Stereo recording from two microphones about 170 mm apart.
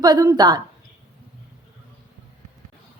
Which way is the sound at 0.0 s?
20° right (ahead or behind).